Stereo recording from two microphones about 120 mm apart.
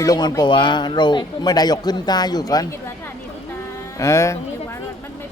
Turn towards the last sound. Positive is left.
turn(degrees=25)  # may be behind; listen again after turning